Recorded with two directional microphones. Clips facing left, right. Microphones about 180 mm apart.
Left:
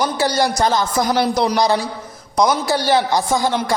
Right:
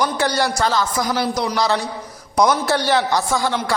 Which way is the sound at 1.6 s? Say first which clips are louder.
Left 3 dB; 15° left (ahead or behind).